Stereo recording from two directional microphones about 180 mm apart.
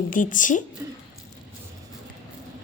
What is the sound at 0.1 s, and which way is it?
Speech, 45° left (ahead or behind).